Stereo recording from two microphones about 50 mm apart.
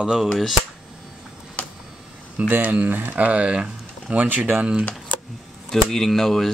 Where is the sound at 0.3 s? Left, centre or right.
Centre.